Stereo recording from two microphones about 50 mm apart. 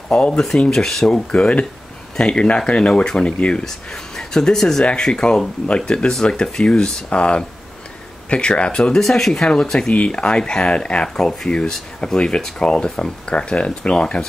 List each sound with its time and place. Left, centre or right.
0.1 s speech: centre
1.3 s speech: left
3.6 s speech: centre
9.0 s speech: centre
9.3 s speech: centre